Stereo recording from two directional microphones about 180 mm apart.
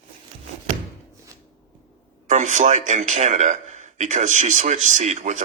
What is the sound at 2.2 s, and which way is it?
A man's voice, 40° right (ahead or behind).